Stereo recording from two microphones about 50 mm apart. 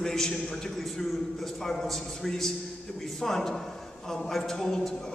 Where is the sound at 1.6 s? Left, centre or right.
Centre.